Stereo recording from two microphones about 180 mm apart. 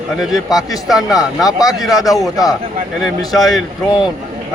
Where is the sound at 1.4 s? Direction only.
20° left (ahead or behind).